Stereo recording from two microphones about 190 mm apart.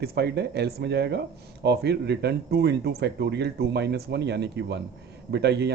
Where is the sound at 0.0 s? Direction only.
55° right (ahead or behind).